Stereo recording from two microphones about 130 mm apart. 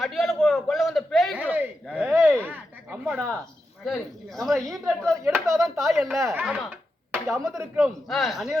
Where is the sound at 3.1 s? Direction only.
10° right (ahead or behind).